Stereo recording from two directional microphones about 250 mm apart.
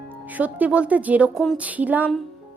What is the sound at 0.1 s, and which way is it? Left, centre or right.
Speech, centre.